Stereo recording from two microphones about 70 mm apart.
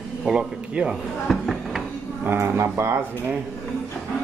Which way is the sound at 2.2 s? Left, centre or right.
Right.